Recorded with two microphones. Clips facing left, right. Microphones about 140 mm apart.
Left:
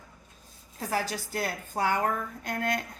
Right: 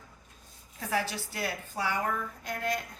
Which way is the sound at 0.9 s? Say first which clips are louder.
Left 1 dB; 45° left (ahead or behind).